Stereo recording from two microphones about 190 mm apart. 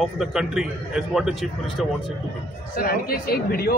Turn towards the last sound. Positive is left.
turn(degrees=50)  # may be behind; listen again after turning